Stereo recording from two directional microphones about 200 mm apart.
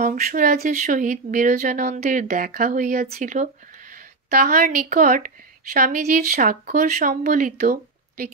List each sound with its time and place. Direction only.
0.0 s a woman's voice: 45° right (ahead or behind)